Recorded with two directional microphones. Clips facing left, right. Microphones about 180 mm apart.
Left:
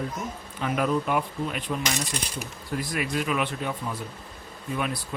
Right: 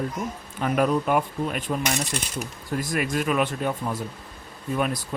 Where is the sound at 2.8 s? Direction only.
45° right (ahead or behind).